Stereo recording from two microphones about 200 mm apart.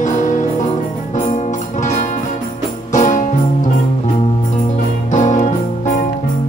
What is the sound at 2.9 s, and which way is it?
Music, 40° left (ahead or behind).